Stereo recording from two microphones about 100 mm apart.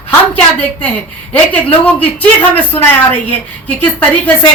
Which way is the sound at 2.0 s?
15° left (ahead or behind).